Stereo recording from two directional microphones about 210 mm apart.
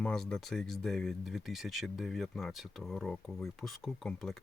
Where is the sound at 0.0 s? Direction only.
5° left (ahead or behind).